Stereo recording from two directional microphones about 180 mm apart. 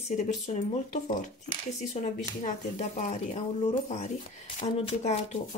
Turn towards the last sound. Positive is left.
turn(degrees=35)  # may be behind; listen again after turning